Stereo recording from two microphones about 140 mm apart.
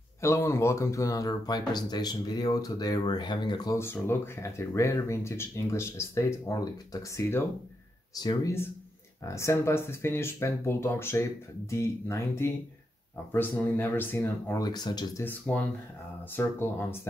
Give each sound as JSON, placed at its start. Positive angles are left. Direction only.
{"t": 0.2, "sound": "speech", "side_deg": 20}
{"t": 3.7, "sound": "speech", "side_deg": 15}
{"t": 8.2, "sound": "speech", "side_deg": 30}
{"t": 14.6, "sound": "speech", "side_deg": 30}
{"t": 15.2, "sound": "speech", "side_deg": 10}